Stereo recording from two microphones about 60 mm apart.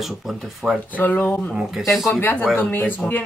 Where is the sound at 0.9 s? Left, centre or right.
Left.